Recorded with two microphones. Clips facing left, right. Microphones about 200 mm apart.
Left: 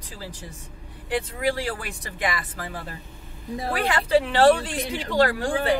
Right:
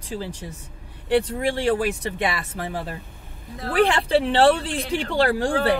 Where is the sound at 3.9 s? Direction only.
30° right (ahead or behind).